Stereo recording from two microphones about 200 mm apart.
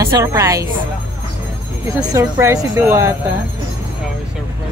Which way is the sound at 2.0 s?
15° right (ahead or behind).